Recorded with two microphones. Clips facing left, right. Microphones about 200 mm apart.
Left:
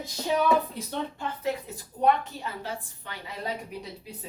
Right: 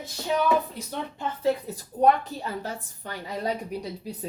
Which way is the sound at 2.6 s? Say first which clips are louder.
Right 1 dB; 40° right (ahead or behind).